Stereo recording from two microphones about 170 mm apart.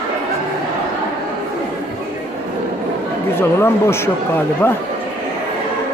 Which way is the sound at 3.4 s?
15° left (ahead or behind).